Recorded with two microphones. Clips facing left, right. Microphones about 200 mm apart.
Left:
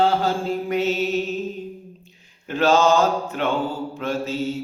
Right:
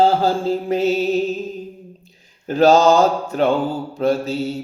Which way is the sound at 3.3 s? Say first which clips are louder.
Right 6 dB; 35° right (ahead or behind).